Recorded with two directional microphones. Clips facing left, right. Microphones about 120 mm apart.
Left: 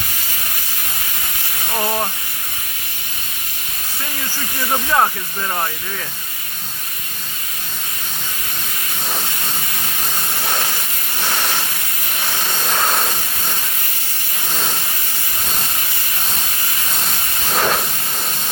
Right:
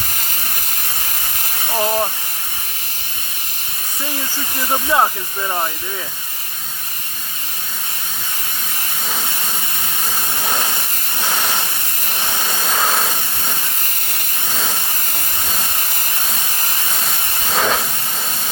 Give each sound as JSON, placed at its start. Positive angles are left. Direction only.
{"t": 1.7, "sound": "hiss", "side_deg": -5}
{"t": 4.7, "sound": "speech", "side_deg": -10}
{"t": 11.2, "sound": "hiss", "side_deg": -15}
{"t": 12.5, "sound": "vehicle", "side_deg": -5}
{"t": 17.5, "sound": "steam", "side_deg": 5}